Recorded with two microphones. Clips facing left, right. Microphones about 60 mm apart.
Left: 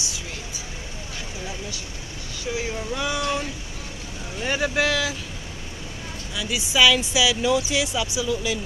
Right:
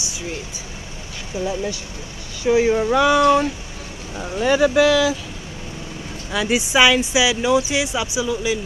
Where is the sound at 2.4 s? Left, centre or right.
Right.